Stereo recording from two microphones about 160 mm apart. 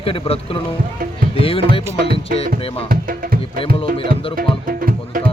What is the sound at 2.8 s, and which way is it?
Music, 65° right (ahead or behind).